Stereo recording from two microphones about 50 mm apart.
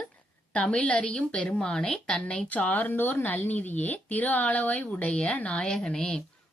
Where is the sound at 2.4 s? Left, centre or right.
Left.